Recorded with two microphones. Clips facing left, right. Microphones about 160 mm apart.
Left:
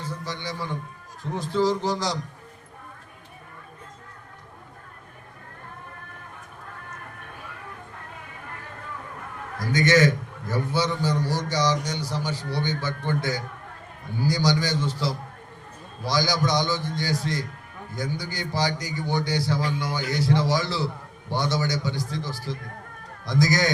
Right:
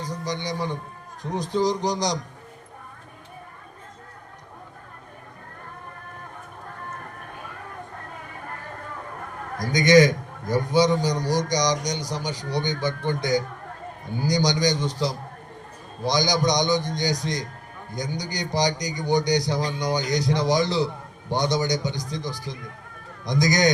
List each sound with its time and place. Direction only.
0.0 s a man's voice: 15° right (ahead or behind)
9.7 s a man's voice: 15° right (ahead or behind)